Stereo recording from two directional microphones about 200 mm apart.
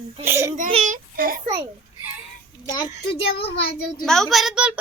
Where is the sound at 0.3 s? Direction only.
10° right (ahead or behind).